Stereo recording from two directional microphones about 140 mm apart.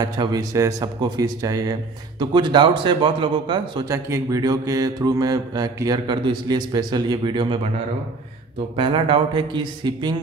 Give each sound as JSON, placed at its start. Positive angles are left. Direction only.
{"t": 0.0, "sound": "speech", "side_deg": -25}
{"t": 3.9, "sound": "mantra", "side_deg": -20}
{"t": 8.7, "sound": "speech", "side_deg": -35}